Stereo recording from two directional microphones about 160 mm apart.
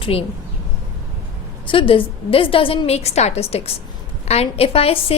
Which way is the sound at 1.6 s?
35° left (ahead or behind).